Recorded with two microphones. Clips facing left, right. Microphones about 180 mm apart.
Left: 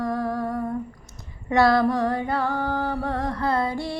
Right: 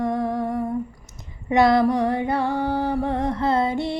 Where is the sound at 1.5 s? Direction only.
20° right (ahead or behind).